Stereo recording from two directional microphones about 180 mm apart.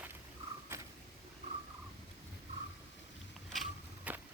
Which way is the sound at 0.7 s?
15° right (ahead or behind).